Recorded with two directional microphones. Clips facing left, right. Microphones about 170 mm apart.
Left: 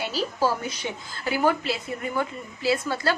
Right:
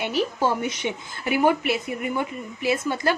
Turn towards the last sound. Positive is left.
turn(degrees=-20)  # may be behind; listen again after turning